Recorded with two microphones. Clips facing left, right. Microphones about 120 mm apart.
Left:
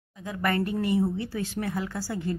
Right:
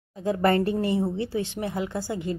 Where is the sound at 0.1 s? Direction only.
35° right (ahead or behind).